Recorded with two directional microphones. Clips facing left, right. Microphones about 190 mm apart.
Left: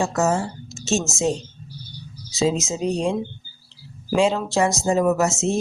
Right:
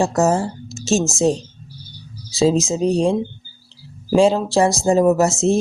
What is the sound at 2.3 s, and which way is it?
Speech, 35° right (ahead or behind).